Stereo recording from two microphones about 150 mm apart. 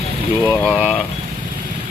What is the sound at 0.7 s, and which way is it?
Speech, 5° right (ahead or behind).